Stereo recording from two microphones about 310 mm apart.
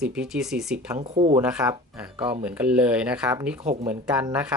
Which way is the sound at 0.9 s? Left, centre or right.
Right.